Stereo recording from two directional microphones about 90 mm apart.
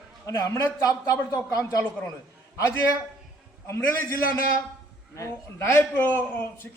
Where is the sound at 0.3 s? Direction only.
35° left (ahead or behind).